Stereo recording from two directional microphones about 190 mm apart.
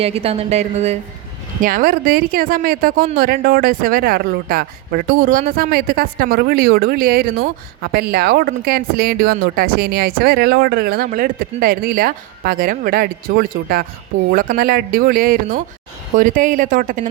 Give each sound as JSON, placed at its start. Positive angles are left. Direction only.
{"t": 0.0, "sound": "speech", "side_deg": -30}
{"t": 1.6, "sound": "speech", "side_deg": -50}